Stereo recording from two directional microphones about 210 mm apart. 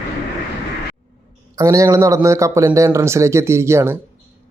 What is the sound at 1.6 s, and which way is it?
Speech, 15° right (ahead or behind).